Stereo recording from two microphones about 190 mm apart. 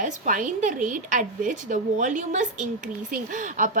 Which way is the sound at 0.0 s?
45° right (ahead or behind).